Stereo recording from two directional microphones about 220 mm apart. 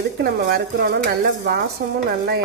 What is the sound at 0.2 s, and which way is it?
Stir, 50° right (ahead or behind).